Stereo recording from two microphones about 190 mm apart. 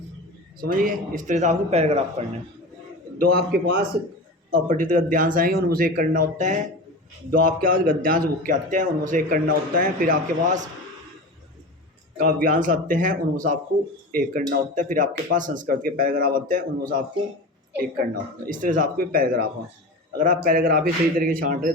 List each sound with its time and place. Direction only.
0.6 s a man's voice: 50° right (ahead or behind)
3.2 s speech: 55° right (ahead or behind)
4.5 s speech: 45° right (ahead or behind)
12.1 s speech: 45° right (ahead or behind)
18.1 s speech: 45° right (ahead or behind)